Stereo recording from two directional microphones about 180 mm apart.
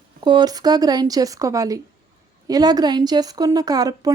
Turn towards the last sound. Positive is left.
turn(degrees=-20)  # may be behind; listen again after turning